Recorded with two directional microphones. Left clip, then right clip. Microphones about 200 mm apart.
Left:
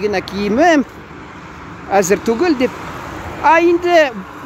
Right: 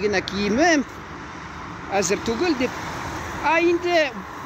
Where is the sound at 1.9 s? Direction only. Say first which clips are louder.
Left 9 dB; 40° left (ahead or behind).